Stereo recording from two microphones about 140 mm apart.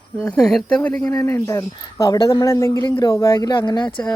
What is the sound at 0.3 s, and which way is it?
Speech, 5° left (ahead or behind).